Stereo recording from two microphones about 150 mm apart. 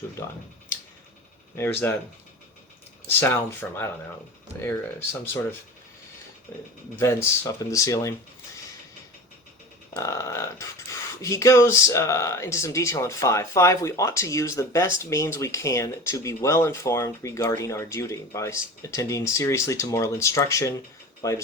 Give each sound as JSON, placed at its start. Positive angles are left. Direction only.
{"t": 1.5, "sound": "speech", "side_deg": 15}
{"t": 3.2, "sound": "speech", "side_deg": 15}
{"t": 9.9, "sound": "speech", "side_deg": 20}